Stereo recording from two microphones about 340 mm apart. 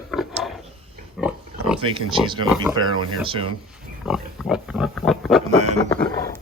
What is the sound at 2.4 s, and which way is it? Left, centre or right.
Speech, centre.